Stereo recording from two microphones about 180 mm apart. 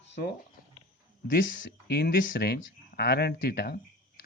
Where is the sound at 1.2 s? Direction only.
55° left (ahead or behind).